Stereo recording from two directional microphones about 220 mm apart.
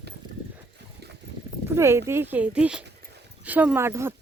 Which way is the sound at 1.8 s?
10° right (ahead or behind).